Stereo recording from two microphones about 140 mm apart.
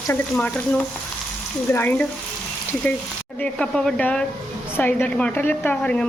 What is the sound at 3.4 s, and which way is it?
Speech, 5° left (ahead or behind).